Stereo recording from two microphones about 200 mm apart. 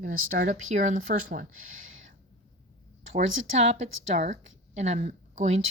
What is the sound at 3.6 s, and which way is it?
A woman's voice, 35° right (ahead or behind).